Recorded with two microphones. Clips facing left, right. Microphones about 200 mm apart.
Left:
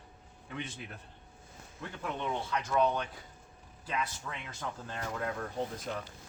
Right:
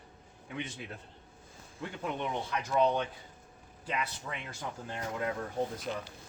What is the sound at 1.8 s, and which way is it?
Speech, 15° right (ahead or behind).